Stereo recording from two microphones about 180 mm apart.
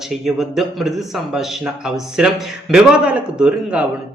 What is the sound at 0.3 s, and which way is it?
A man's voice, centre (ahead or behind).